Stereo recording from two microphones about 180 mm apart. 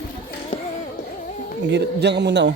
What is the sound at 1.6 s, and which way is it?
Speech, 70° right (ahead or behind).